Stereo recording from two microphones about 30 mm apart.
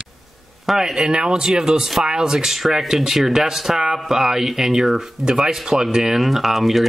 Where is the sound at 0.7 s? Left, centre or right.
Right.